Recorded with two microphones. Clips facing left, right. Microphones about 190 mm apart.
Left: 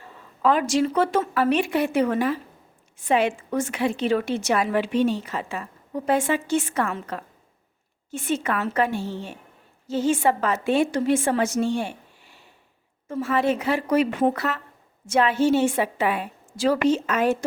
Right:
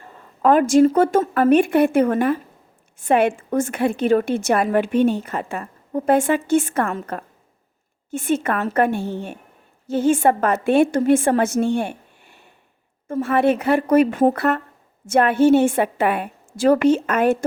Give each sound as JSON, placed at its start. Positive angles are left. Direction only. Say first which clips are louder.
{"t": 0.4, "sound": "a woman's voice", "louder": "right 7 dB", "side_deg": -50}